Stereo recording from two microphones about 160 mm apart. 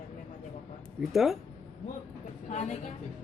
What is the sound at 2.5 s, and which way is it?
Speech, 50° left (ahead or behind).